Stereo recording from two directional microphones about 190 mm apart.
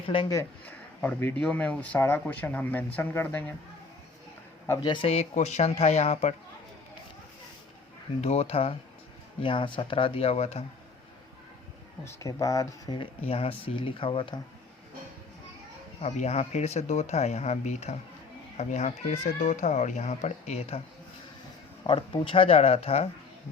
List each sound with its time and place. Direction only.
0.1 s speech: 20° left (ahead or behind)
1.0 s speech: 10° left (ahead or behind)
4.6 s speech: 15° left (ahead or behind)
4.9 s speech: 30° left (ahead or behind)
8.2 s speech: 35° left (ahead or behind)
12.0 s speech: 15° left (ahead or behind)
16.0 s speech: 35° left (ahead or behind)
21.8 s speech: 25° left (ahead or behind)